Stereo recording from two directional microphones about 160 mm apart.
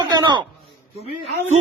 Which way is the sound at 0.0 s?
25° right (ahead or behind).